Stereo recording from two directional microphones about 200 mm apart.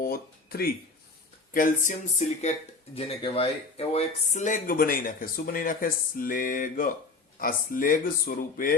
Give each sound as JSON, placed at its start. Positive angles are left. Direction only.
{"t": 0.0, "sound": "speech", "side_deg": 50}